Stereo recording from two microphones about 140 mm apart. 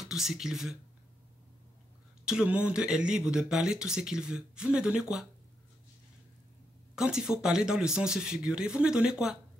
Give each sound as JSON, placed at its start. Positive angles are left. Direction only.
{"t": 0.0, "sound": "speech", "side_deg": 0}
{"t": 2.2, "sound": "speech", "side_deg": -5}
{"t": 7.0, "sound": "speech", "side_deg": -5}